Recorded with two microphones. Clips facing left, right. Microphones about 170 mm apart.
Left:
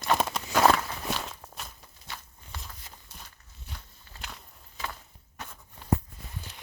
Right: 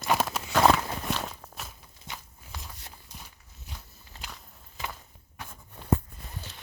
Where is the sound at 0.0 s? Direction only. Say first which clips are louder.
Even; centre (ahead or behind).